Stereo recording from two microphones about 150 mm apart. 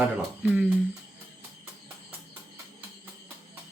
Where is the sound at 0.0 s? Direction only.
5° right (ahead or behind).